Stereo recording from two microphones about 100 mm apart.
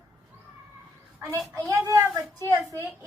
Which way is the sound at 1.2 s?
30° right (ahead or behind).